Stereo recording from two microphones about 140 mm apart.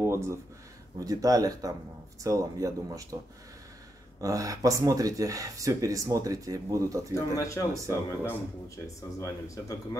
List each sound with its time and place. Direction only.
0.0 s a sound: 20° right (ahead or behind)
0.9 s speech: 25° right (ahead or behind)
4.2 s speech: 25° right (ahead or behind)
7.2 s speech: 20° left (ahead or behind)